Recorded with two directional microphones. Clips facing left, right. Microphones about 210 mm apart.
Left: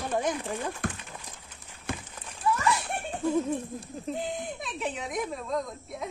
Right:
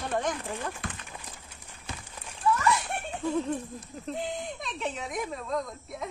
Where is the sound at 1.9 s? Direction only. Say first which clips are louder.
Left 7 dB; 50° left (ahead or behind).